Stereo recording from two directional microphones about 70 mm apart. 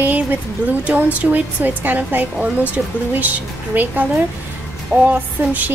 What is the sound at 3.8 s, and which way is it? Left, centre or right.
A woman's voice, right.